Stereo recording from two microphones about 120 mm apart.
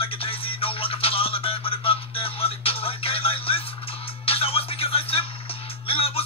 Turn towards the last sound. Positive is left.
turn(degrees=55)  # may be behind; listen again after turning